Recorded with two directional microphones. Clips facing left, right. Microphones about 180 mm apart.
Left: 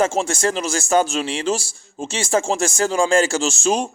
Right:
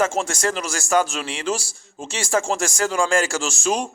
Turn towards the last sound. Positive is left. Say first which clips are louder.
# left 3 dB
turn(degrees=25)  # may be behind; listen again after turning